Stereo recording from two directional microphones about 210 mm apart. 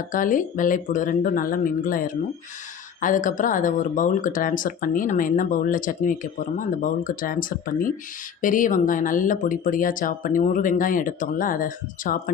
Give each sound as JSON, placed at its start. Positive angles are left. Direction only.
{"t": 0.1, "sound": "speech", "side_deg": 40}